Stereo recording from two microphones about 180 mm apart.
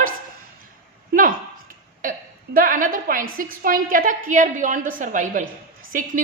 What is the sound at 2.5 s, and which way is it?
A woman's voice, 50° right (ahead or behind).